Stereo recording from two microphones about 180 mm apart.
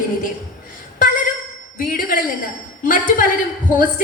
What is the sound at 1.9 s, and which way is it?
A woman's voice, 50° left (ahead or behind).